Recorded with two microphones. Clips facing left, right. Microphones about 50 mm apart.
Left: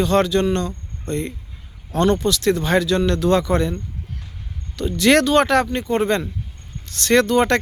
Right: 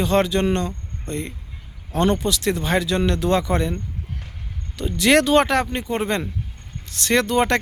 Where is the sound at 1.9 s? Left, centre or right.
Centre.